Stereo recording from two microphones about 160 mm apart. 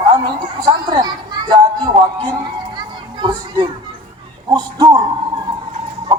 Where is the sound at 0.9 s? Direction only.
25° right (ahead or behind).